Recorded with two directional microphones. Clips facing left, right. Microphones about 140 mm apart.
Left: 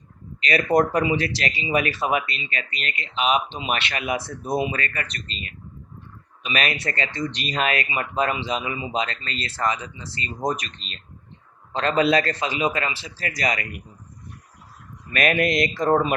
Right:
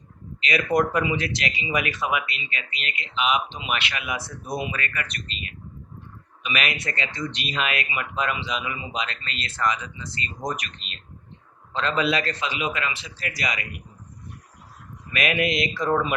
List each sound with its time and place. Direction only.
0.4 s speech: 35° left (ahead or behind)
15.1 s speech: 40° left (ahead or behind)